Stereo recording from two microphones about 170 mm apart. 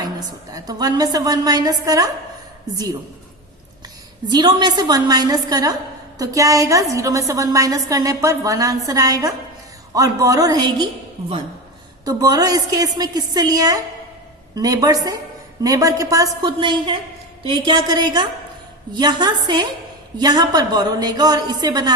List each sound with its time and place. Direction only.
0.5 s a woman's voice: 20° right (ahead or behind)
4.3 s a woman's voice: 25° right (ahead or behind)
12.0 s a woman's voice: 20° right (ahead or behind)